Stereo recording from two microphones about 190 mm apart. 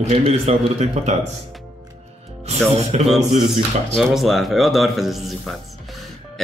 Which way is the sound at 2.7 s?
35° right (ahead or behind).